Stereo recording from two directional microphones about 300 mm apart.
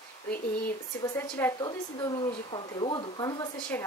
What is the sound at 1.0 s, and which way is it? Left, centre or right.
Speech, centre.